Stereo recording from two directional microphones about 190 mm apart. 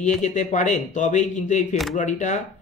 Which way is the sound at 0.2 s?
40° left (ahead or behind).